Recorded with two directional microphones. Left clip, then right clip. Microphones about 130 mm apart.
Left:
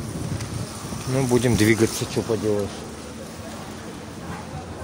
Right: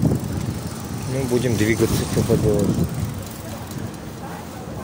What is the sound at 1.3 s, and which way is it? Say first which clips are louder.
Speech: left 1 dB; 65° left (ahead or behind).